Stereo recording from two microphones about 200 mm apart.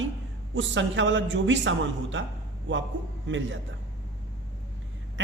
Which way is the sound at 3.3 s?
70° right (ahead or behind).